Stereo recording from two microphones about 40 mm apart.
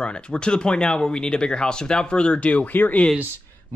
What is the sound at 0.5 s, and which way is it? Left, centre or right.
Speech, left.